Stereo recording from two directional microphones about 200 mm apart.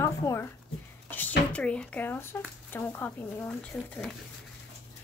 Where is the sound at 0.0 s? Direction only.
15° left (ahead or behind).